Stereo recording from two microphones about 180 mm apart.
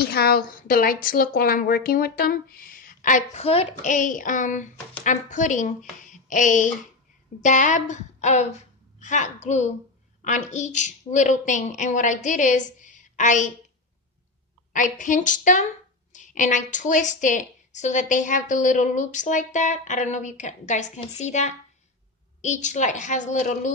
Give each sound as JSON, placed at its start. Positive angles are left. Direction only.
{"t": 0.0, "sound": "a woman's voice", "side_deg": 60}
{"t": 6.0, "sound": "a sound", "side_deg": 45}
{"t": 7.4, "sound": "a woman's voice", "side_deg": 45}
{"t": 14.7, "sound": "a woman's voice", "side_deg": 45}